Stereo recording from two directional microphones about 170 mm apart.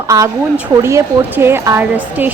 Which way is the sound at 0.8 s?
15° right (ahead or behind).